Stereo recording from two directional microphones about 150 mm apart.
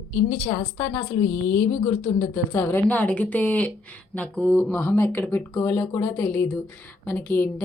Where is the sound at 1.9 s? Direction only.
25° left (ahead or behind).